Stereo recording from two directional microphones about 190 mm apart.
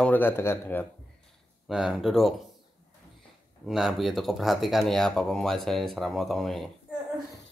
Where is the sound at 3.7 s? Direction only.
Centre (ahead or behind).